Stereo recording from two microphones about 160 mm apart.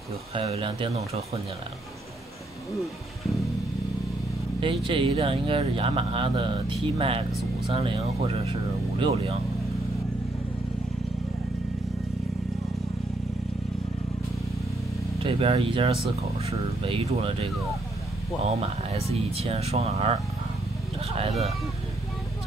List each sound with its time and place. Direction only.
0.3 s speech: 35° right (ahead or behind)
4.6 s speech: 35° right (ahead or behind)
15.1 s speech: 35° right (ahead or behind)
19.3 s speech: 40° right (ahead or behind)